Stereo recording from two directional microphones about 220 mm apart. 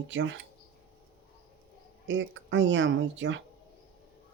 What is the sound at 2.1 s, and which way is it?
Speech, 55° right (ahead or behind).